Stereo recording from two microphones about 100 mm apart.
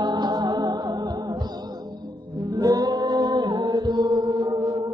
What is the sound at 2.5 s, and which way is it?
Music, 40° right (ahead or behind).